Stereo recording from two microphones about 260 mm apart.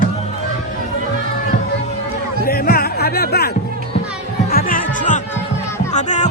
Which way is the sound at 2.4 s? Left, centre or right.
Left.